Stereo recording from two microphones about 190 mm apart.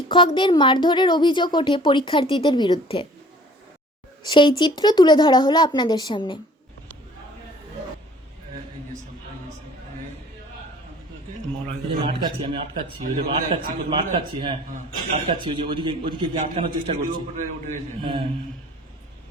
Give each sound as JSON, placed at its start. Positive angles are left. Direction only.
{"t": 0.1, "sound": "a woman's voice", "side_deg": 25}
{"t": 4.2, "sound": "a woman's voice", "side_deg": 25}
{"t": 12.0, "sound": "a man's voice", "side_deg": -30}